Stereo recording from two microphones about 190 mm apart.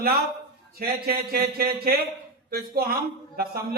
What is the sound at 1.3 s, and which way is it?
A man's voice, 55° right (ahead or behind).